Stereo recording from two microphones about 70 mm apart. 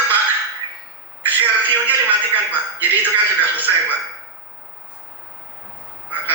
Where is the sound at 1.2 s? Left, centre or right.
Right.